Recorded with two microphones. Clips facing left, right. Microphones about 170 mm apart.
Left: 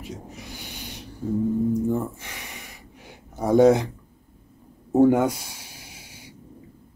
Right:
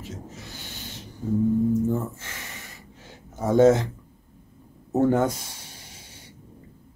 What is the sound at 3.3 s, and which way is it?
Speech, 15° left (ahead or behind).